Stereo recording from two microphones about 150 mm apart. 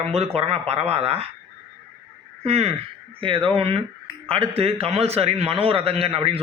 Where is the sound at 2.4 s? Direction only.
45° right (ahead or behind).